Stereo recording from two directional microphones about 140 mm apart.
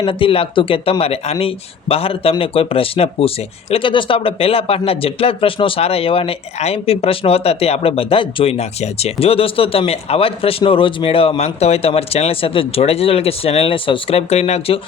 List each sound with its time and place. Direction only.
0.0 s speech: 40° left (ahead or behind)